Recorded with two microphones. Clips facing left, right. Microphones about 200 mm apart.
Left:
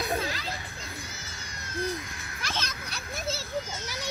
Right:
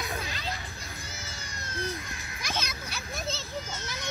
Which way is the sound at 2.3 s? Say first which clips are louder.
Even; 15° right (ahead or behind).